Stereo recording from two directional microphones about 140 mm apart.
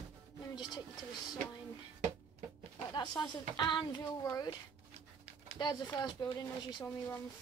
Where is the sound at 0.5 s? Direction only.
30° left (ahead or behind).